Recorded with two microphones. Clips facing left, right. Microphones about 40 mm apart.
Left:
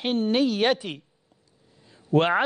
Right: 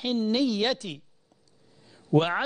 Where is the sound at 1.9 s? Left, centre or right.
Centre.